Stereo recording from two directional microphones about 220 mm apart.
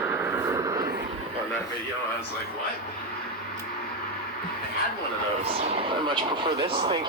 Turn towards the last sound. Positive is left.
turn(degrees=-20)  # may be behind; listen again after turning